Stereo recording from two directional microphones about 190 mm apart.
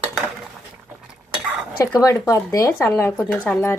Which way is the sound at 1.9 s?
15° left (ahead or behind).